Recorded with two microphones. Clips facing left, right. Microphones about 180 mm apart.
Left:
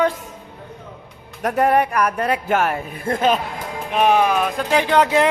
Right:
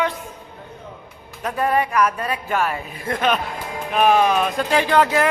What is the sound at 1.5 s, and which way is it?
Speech, 70° left (ahead or behind).